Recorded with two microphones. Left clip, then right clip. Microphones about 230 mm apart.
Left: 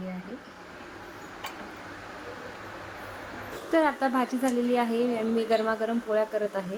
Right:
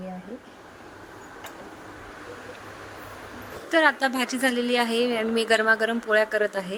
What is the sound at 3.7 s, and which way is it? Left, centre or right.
A woman's voice, right.